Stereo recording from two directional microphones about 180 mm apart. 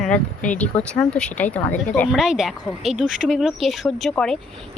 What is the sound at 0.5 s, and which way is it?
Speech, 5° left (ahead or behind).